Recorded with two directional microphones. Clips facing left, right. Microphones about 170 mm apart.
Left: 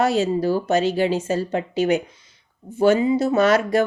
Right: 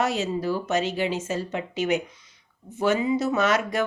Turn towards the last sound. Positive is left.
turn(degrees=35)  # may be behind; listen again after turning